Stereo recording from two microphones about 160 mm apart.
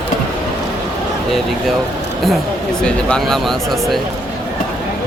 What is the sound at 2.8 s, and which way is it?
Speech, 5° left (ahead or behind).